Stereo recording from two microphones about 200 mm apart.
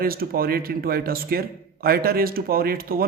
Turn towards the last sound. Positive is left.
turn(degrees=-45)  # may be behind; listen again after turning